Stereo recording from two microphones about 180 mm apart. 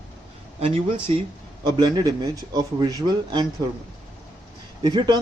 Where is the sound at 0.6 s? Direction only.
30° right (ahead or behind).